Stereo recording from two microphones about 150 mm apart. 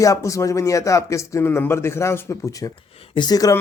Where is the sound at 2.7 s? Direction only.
35° left (ahead or behind).